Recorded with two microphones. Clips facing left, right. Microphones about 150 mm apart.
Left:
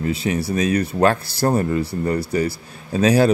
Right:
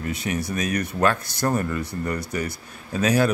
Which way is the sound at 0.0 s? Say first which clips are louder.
Left 5 dB; 25° left (ahead or behind).